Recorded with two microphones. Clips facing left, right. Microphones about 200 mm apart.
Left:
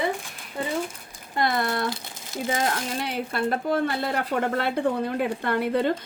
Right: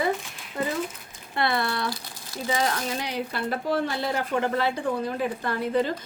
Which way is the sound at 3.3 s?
50° left (ahead or behind).